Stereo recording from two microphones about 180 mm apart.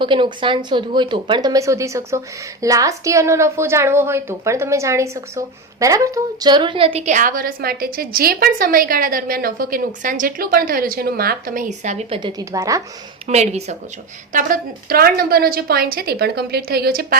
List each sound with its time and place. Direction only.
0.0 s a woman's voice: 25° right (ahead or behind)
12.4 s a woman's voice: 15° right (ahead or behind)
13.2 s a woman's voice: 40° right (ahead or behind)
14.3 s a woman's voice: 50° right (ahead or behind)